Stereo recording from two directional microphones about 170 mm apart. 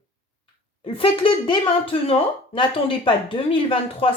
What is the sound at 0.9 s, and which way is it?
Speech, 30° left (ahead or behind).